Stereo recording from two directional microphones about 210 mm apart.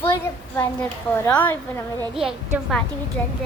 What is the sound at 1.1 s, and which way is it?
Speech, 10° left (ahead or behind).